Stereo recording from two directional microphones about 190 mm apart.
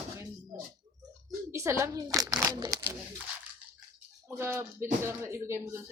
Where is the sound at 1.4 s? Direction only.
15° right (ahead or behind).